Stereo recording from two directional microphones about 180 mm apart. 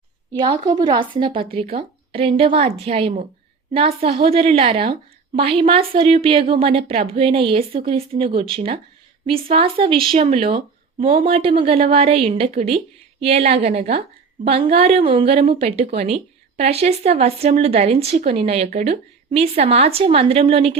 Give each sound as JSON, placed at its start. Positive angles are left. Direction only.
{"t": 0.3, "sound": "a woman's voice", "side_deg": -25}